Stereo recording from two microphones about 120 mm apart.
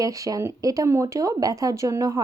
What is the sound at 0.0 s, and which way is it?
Speech, 30° right (ahead or behind).